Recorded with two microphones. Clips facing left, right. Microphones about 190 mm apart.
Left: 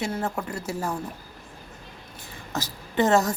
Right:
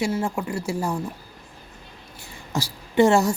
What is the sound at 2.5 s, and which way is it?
Speech, 10° right (ahead or behind).